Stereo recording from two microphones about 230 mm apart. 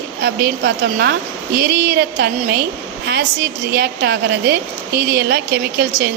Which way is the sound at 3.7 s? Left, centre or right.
Right.